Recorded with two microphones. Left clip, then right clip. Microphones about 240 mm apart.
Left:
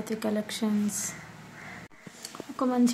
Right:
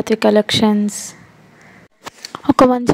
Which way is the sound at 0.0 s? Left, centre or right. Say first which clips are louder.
Right 18 dB; right.